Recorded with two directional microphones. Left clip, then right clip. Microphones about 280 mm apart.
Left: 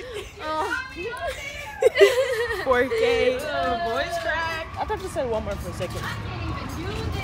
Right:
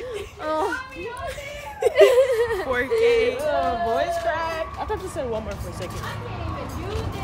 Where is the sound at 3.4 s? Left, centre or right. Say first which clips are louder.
Right 2 dB; right.